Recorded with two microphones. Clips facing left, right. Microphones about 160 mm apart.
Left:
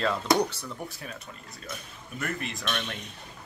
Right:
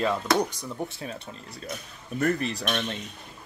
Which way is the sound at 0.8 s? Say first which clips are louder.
Right 4 dB; 30° right (ahead or behind).